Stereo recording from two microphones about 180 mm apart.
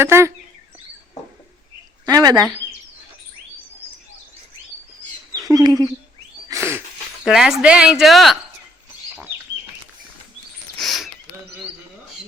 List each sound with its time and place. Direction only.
0.0 s speech: 15° right (ahead or behind)
2.0 s speech: 20° right (ahead or behind)
5.4 s speech: 20° right (ahead or behind)
6.5 s a sound: 15° right (ahead or behind)
7.3 s speech: centre (ahead or behind)
10.8 s a sound: centre (ahead or behind)